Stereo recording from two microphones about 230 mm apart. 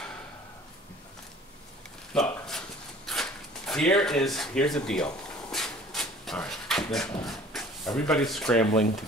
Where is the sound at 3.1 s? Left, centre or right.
Centre.